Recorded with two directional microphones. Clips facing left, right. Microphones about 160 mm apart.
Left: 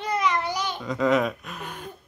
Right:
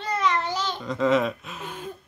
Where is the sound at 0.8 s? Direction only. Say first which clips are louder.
Even; centre (ahead or behind).